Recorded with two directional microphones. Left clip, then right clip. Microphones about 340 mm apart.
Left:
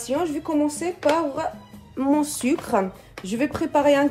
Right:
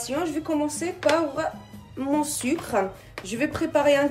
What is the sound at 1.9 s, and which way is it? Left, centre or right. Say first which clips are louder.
Speech: left 3 dB; centre.